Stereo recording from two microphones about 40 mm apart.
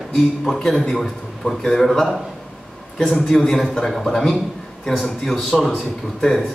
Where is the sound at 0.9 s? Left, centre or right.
Centre.